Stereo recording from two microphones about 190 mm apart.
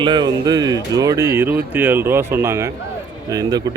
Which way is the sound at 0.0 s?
20° right (ahead or behind).